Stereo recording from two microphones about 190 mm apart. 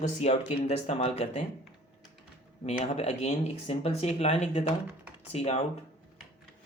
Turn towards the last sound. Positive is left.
turn(degrees=35)  # may be behind; listen again after turning